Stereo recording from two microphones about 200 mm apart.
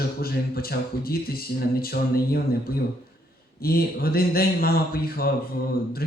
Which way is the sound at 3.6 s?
50° left (ahead or behind).